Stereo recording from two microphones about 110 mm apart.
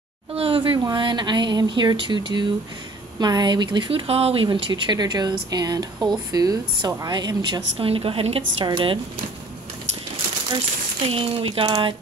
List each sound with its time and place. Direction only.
0.3 s a sound: 60° right (ahead or behind)
0.7 s speech: 40° right (ahead or behind)
4.1 s a woman's voice: 65° right (ahead or behind)
4.5 s speech: 40° right (ahead or behind)
7.8 s a woman's voice: 55° right (ahead or behind)
8.6 s speech: 50° right (ahead or behind)
11.1 s a woman's voice: 60° right (ahead or behind)